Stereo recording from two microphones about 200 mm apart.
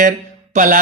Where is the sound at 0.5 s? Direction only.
40° right (ahead or behind).